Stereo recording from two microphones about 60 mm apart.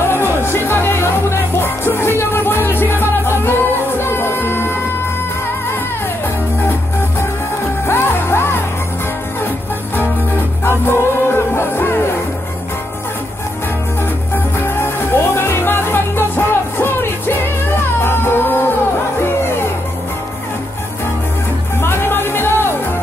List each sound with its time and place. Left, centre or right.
0.0 s music: left
7.8 s music: left
10.6 s music: left
14.3 s music: left
21.8 s music: left